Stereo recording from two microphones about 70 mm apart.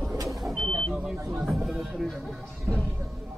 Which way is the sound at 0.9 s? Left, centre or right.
Centre.